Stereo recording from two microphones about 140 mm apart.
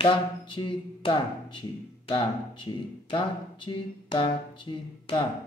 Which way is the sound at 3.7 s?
35° left (ahead or behind).